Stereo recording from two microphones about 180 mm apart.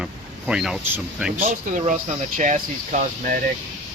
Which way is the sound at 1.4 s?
45° right (ahead or behind).